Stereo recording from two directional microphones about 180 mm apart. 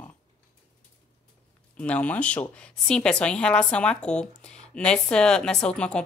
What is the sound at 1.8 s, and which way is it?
A woman's voice, 5° left (ahead or behind).